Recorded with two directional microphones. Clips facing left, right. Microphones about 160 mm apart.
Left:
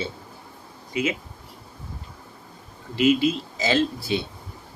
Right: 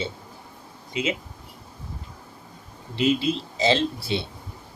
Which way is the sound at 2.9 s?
30° right (ahead or behind).